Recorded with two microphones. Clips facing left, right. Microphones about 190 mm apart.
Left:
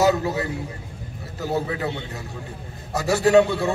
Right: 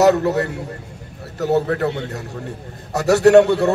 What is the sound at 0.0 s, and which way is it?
A man's voice, 70° right (ahead or behind).